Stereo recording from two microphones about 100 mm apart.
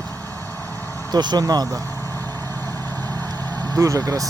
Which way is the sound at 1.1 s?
45° right (ahead or behind).